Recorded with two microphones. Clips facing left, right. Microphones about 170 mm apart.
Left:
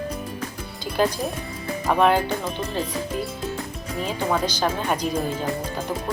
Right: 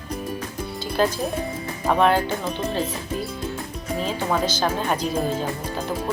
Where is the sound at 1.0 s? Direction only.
15° left (ahead or behind).